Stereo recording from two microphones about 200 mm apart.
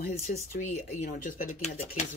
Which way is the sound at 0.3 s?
40° left (ahead or behind).